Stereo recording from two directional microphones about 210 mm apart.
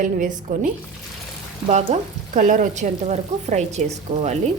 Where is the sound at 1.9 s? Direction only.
35° right (ahead or behind).